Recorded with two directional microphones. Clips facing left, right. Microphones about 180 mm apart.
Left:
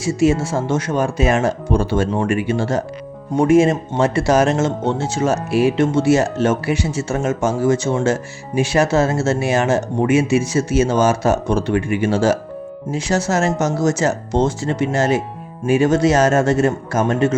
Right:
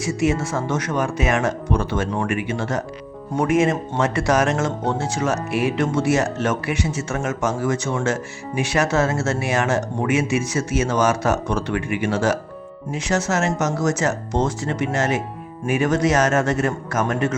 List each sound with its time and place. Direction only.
0.0 s speech: 30° left (ahead or behind)